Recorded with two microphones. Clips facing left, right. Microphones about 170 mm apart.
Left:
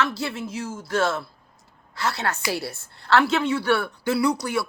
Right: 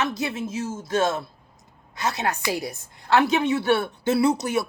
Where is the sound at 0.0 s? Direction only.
20° right (ahead or behind).